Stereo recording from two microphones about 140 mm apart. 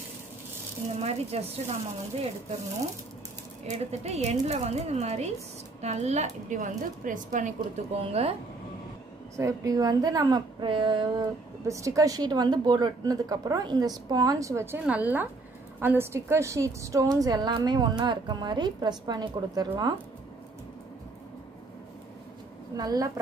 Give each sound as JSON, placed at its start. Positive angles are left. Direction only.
{"t": 0.9, "sound": "speech", "side_deg": -50}
{"t": 3.6, "sound": "speech", "side_deg": -50}
{"t": 9.4, "sound": "a woman's voice", "side_deg": -25}
{"t": 11.6, "sound": "a woman's voice", "side_deg": -20}
{"t": 22.8, "sound": "a woman's voice", "side_deg": -25}